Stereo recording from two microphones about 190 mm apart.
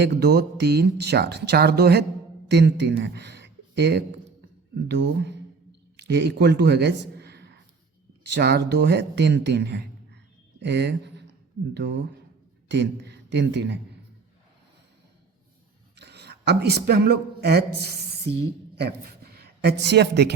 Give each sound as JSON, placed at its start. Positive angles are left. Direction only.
{"t": 0.0, "sound": "a man's voice", "side_deg": -60}
{"t": 16.0, "sound": "a woman's voice", "side_deg": -60}